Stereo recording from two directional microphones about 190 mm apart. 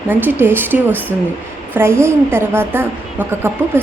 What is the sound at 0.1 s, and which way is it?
A woman's voice, 10° right (ahead or behind).